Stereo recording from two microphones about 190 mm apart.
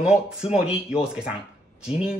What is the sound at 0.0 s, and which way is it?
Speech, 5° right (ahead or behind).